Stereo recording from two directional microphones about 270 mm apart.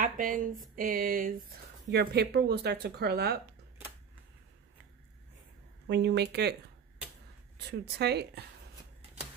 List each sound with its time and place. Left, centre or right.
0.0 s speech: right
5.9 s speech: right
7.5 s speech: right